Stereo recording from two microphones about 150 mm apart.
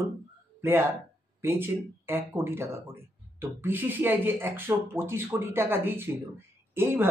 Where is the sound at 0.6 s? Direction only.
15° right (ahead or behind).